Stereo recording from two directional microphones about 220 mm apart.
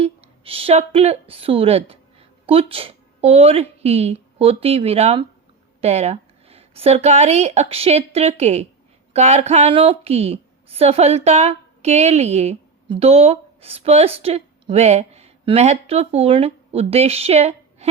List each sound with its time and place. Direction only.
0.0 s a woman's voice: 25° right (ahead or behind)